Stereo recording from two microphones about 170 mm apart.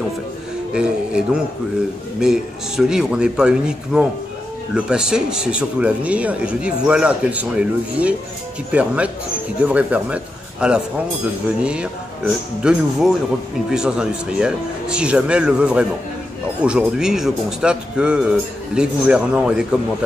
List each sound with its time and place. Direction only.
0.7 s speech: 5° right (ahead or behind)